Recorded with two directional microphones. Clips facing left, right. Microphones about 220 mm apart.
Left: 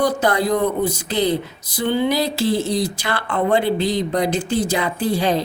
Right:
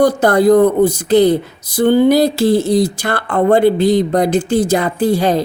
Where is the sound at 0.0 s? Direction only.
50° right (ahead or behind).